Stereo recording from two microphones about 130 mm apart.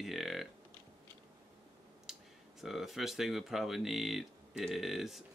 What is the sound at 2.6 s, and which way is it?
Speech, centre (ahead or behind).